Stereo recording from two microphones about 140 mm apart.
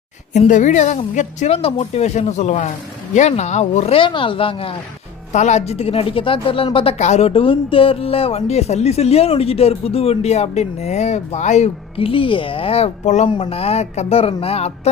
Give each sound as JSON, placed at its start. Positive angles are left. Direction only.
{"t": 0.3, "sound": "a woman's voice", "side_deg": 60}
{"t": 1.5, "sound": "speech", "side_deg": 45}
{"t": 4.0, "sound": "speech", "side_deg": 35}
{"t": 5.3, "sound": "speech", "side_deg": 55}
{"t": 7.0, "sound": "speech", "side_deg": 50}